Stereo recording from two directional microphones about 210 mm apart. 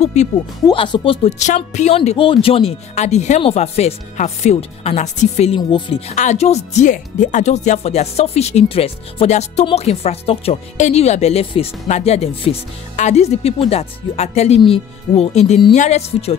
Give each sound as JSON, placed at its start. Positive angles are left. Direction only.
{"t": 0.0, "sound": "speech", "side_deg": 30}
{"t": 0.7, "sound": "speech", "side_deg": 20}